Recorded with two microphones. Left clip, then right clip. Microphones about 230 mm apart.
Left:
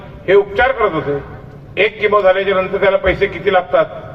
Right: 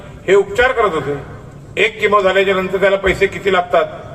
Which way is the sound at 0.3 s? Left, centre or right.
Right.